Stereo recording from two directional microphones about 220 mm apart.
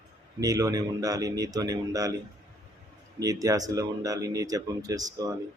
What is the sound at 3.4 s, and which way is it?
Speech, 15° right (ahead or behind).